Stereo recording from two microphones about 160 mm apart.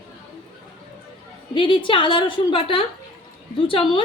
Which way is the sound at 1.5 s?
30° left (ahead or behind).